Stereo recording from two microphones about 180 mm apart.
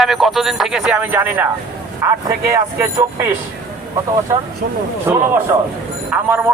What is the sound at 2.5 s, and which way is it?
Speech, 15° right (ahead or behind).